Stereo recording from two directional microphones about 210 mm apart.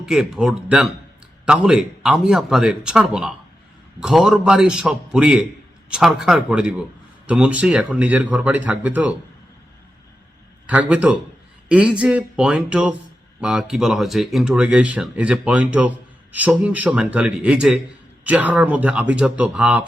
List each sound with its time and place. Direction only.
0.0 s speech: centre (ahead or behind)
10.7 s speech: 5° right (ahead or behind)